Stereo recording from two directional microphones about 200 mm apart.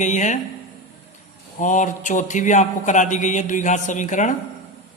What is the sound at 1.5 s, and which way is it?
A man's voice, 40° left (ahead or behind).